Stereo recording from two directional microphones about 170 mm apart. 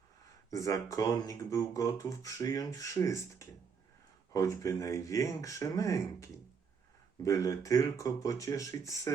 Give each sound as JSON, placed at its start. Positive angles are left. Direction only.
{"t": 0.5, "sound": "speech", "side_deg": 20}